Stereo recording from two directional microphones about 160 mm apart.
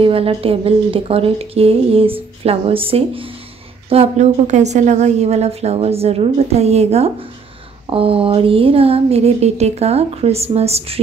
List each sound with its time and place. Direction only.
0.0 s a woman's voice: 35° right (ahead or behind)